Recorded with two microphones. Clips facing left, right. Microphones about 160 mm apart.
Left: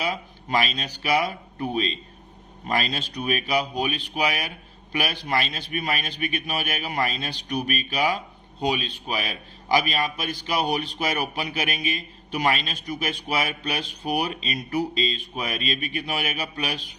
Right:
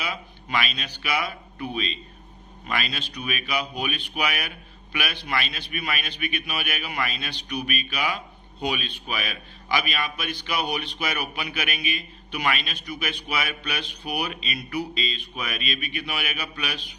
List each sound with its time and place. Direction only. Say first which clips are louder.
0.0 s a man's voice: left 4 dB; 35° left (ahead or behind)